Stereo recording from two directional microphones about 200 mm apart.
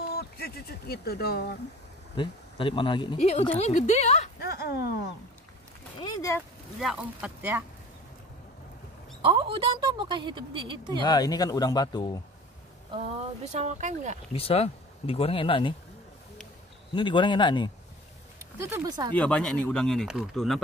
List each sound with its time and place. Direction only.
0.1 s speech: 50° left (ahead or behind)
2.1 s a woman's voice: 25° left (ahead or behind)
4.4 s a sound: 50° left (ahead or behind)
5.9 s speech: 25° left (ahead or behind)
6.8 s speech: 5° right (ahead or behind)
9.2 s a woman's voice: 25° right (ahead or behind)
11.0 s speech: 20° left (ahead or behind)
12.9 s speech: 35° right (ahead or behind)
14.3 s speech: 30° left (ahead or behind)
16.9 s speech: 25° left (ahead or behind)
18.4 s speech: 15° right (ahead or behind)
19.1 s speech: 5° left (ahead or behind)